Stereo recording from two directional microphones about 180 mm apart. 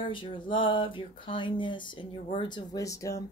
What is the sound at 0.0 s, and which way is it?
Speech, 30° left (ahead or behind).